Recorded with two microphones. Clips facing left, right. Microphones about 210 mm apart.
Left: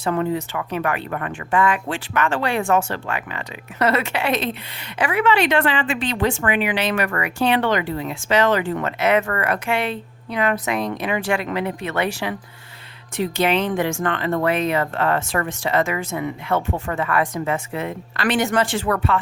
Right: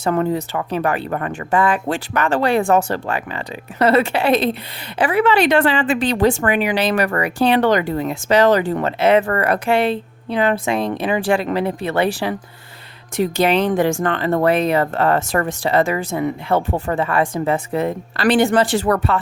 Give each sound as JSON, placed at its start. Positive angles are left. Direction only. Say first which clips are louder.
{"t": 0.0, "sound": "speech", "louder": "right 3 dB", "side_deg": -40}